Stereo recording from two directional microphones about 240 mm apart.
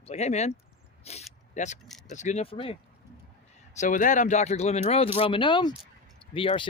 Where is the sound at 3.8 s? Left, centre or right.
Left.